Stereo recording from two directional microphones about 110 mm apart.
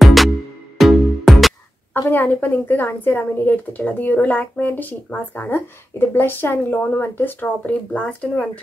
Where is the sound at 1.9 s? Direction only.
20° left (ahead or behind).